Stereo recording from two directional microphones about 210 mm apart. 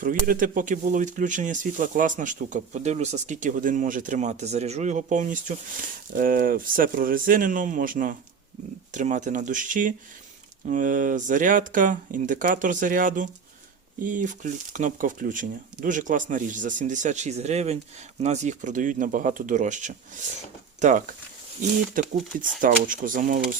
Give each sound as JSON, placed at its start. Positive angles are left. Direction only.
{"t": 0.0, "sound": "speech", "side_deg": -40}
{"t": 22.0, "sound": "speech", "side_deg": -40}